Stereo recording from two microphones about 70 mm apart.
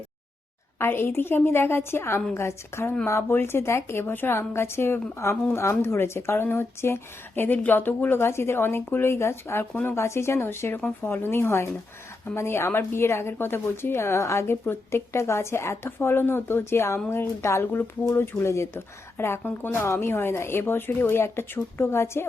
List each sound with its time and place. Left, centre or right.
0.8 s speech: left
14.4 s speech: left